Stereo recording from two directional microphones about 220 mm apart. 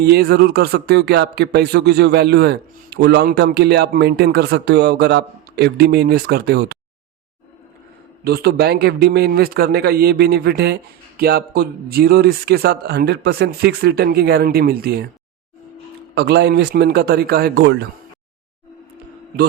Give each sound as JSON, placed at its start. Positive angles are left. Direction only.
{"t": 0.0, "sound": "speech", "side_deg": -45}
{"t": 8.2, "sound": "speech", "side_deg": -45}
{"t": 16.1, "sound": "speech", "side_deg": -50}